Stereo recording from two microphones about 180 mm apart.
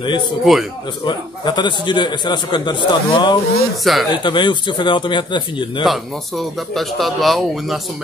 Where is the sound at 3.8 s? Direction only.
Centre (ahead or behind).